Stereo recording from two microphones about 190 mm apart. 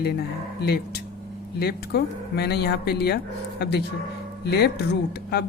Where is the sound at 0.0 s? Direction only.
55° left (ahead or behind).